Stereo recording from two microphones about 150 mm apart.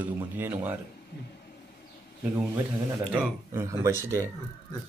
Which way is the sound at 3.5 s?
20° right (ahead or behind).